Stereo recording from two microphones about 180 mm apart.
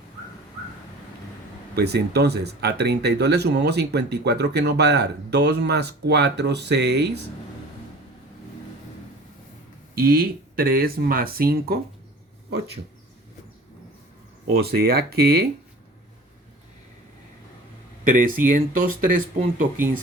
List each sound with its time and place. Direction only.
1.7 s speech: 65° right (ahead or behind)
9.9 s speech: 55° right (ahead or behind)
14.5 s speech: 60° right (ahead or behind)
18.0 s speech: 50° right (ahead or behind)